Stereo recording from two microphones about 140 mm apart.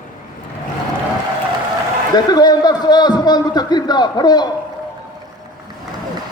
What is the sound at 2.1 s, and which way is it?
A man's voice, 30° left (ahead or behind).